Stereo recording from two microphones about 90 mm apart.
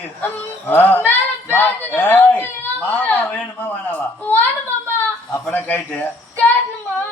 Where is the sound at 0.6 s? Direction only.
20° left (ahead or behind).